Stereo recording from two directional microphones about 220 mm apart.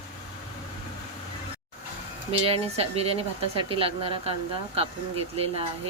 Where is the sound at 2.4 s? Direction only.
25° right (ahead or behind).